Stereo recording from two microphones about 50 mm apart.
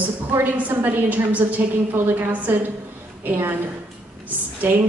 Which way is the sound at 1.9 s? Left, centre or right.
Right.